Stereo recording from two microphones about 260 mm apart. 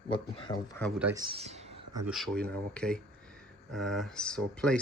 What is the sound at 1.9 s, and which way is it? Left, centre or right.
Speech, centre.